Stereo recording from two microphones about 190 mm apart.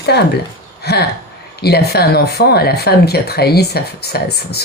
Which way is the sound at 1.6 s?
60° left (ahead or behind).